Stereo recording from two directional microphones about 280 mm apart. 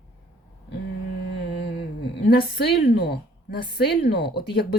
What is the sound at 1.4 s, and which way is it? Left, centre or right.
A woman's voice, left.